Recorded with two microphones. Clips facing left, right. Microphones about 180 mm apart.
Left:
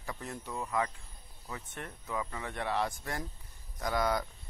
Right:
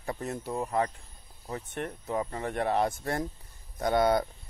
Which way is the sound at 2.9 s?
30° right (ahead or behind).